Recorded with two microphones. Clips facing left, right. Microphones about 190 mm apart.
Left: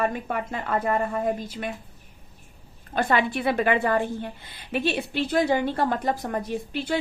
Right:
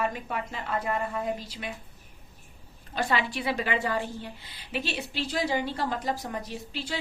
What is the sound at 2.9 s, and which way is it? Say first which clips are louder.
A woman's voice: left 5 dB; 55° left (ahead or behind).